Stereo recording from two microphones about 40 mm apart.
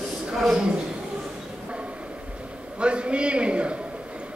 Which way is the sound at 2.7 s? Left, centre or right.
Right.